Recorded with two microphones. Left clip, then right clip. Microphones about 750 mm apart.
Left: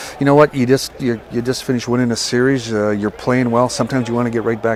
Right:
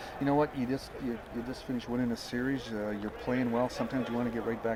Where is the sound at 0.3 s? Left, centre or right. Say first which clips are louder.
Left 18 dB; left.